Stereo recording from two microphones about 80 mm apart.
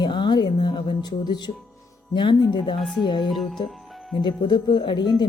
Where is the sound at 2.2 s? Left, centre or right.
Left.